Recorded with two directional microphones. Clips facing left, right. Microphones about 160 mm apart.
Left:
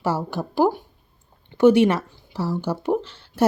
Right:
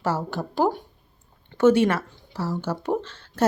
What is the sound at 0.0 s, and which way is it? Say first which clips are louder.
Speech: left 2 dB; 10° left (ahead or behind).